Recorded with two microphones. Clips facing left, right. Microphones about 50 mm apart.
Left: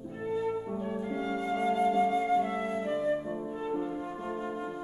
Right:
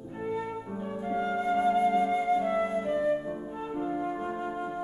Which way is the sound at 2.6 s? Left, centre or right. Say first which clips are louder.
Right 3 dB; centre.